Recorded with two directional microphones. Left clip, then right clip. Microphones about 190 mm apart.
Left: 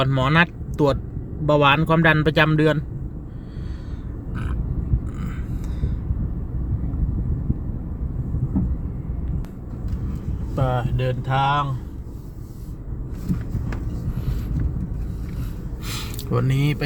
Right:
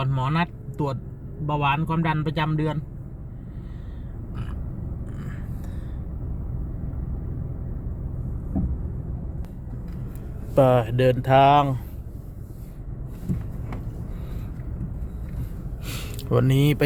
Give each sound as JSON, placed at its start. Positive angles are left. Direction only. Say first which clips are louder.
{"t": 0.0, "sound": "speech", "louder": "left 8 dB", "side_deg": 10}
{"t": 10.5, "sound": "speech", "louder": "right 7 dB", "side_deg": -40}
{"t": 16.3, "sound": "speech", "louder": "right 3 dB", "side_deg": -20}